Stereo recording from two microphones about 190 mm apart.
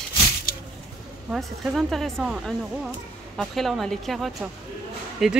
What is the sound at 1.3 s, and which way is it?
Speech, centre (ahead or behind).